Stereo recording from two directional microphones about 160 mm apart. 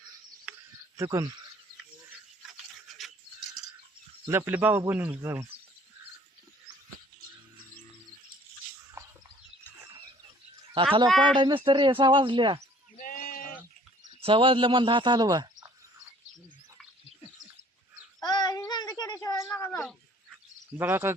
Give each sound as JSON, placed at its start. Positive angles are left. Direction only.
{"t": 0.9, "sound": "speech", "side_deg": -20}
{"t": 2.8, "sound": "a sound", "side_deg": 0}
{"t": 4.3, "sound": "speech", "side_deg": -15}
{"t": 9.0, "sound": "bird", "side_deg": -20}
{"t": 11.3, "sound": "speech", "side_deg": -30}
{"t": 13.0, "sound": "sheep", "side_deg": 60}
{"t": 14.2, "sound": "speech", "side_deg": -35}
{"t": 18.2, "sound": "child singing", "side_deg": 25}
{"t": 20.7, "sound": "speech", "side_deg": -15}